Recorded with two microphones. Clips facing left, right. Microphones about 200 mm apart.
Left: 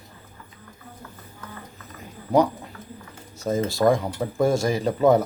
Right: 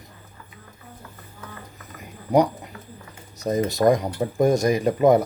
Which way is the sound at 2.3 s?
15° right (ahead or behind).